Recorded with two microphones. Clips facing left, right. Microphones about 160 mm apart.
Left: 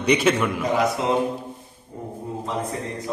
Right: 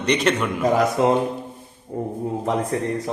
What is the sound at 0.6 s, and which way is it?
Speech, 45° right (ahead or behind).